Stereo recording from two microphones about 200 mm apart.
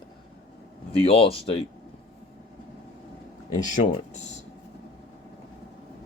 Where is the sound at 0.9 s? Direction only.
30° left (ahead or behind).